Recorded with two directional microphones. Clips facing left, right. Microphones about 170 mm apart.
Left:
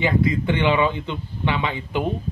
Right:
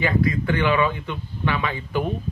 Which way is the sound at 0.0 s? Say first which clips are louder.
Left 1 dB; 20° left (ahead or behind).